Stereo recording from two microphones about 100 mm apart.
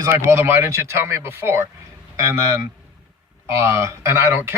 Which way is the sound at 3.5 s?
25° right (ahead or behind).